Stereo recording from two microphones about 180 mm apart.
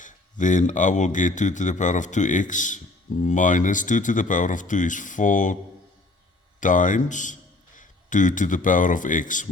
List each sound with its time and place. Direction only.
0.0 s speech: 45° left (ahead or behind)
6.6 s a man's voice: 45° left (ahead or behind)